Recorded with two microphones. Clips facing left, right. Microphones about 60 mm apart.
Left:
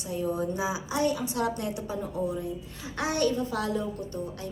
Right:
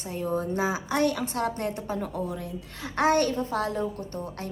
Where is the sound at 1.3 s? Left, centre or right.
Right.